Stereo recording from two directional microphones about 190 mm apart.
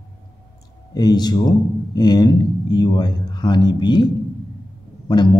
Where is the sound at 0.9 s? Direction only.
20° left (ahead or behind).